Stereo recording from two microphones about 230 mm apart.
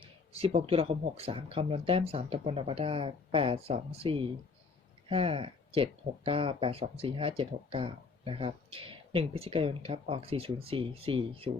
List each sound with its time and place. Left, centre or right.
0.0 s speech: right